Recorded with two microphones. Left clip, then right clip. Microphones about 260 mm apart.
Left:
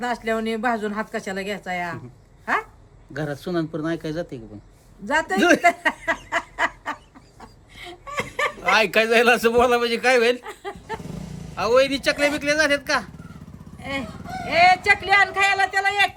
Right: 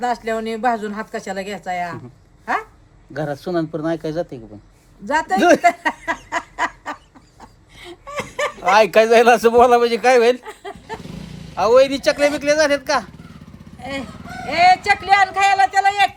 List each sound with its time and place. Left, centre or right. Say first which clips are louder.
0.0 s speech: right 3 dB; centre
3.1 s a man's voice: right 4 dB; centre
5.0 s speech: right 4 dB; centre
6.6 s fowl: right 1 dB; centre
7.4 s a sound: right 1 dB; centre
8.7 s a man's voice: right 6 dB; centre
10.4 s a sound: right 1 dB; centre
11.5 s a man's voice: right 5 dB; centre
13.7 s speech: right 1 dB; centre